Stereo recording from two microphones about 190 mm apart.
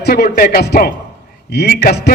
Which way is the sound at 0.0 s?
55° left (ahead or behind).